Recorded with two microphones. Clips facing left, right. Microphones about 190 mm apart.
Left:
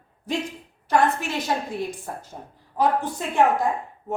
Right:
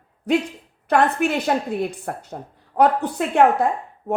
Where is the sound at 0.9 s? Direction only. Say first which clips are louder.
Right 3 dB; 60° right (ahead or behind).